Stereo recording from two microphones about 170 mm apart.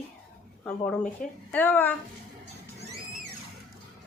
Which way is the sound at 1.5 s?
10° left (ahead or behind).